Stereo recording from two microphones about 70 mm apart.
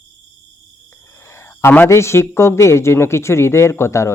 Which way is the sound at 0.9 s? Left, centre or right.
Left.